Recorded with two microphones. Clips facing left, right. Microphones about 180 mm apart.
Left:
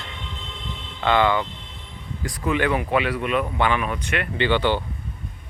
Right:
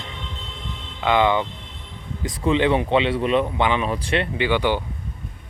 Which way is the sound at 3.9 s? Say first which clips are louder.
Right 4 dB; 30° right (ahead or behind).